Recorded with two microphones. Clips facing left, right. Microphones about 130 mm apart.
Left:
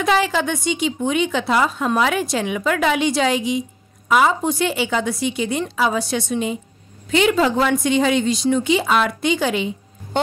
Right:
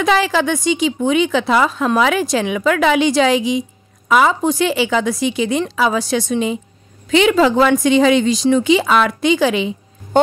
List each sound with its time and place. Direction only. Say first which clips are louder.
0.0 s a woman's voice: right 3 dB; 90° right